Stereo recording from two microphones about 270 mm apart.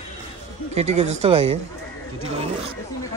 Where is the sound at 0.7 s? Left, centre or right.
Right.